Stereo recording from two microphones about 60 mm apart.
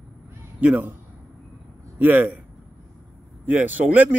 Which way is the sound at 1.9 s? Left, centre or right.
Right.